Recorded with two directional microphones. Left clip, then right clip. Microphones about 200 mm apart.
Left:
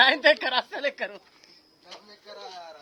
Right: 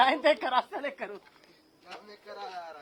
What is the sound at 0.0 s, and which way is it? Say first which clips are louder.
A woman's voice: left 5 dB; 45° left (ahead or behind).